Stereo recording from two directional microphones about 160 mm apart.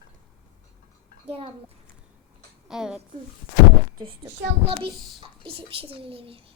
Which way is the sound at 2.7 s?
5° right (ahead or behind).